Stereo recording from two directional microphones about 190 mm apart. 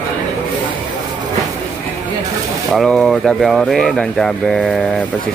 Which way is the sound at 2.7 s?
Centre (ahead or behind).